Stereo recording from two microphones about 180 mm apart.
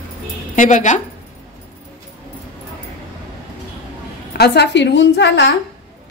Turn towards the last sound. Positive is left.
turn(degrees=70)  # may be behind; listen again after turning